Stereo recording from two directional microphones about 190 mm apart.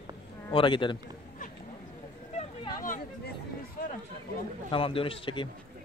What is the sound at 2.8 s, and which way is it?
Chatter, 45° left (ahead or behind).